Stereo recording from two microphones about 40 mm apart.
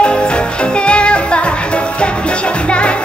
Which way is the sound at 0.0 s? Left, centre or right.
Left.